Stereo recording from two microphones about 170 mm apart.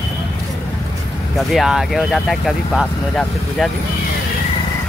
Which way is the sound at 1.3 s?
Centre (ahead or behind).